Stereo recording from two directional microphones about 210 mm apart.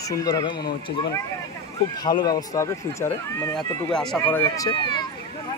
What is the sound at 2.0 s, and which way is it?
Speech, 20° left (ahead or behind).